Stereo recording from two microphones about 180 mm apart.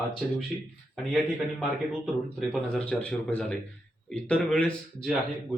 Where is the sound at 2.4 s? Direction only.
Centre (ahead or behind).